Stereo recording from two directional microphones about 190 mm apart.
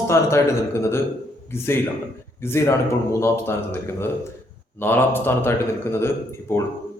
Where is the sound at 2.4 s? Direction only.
15° left (ahead or behind).